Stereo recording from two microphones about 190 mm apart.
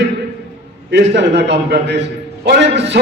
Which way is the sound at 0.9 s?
60° right (ahead or behind).